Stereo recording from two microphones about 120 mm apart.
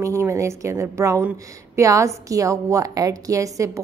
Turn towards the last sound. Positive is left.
turn(degrees=-25)  # may be behind; listen again after turning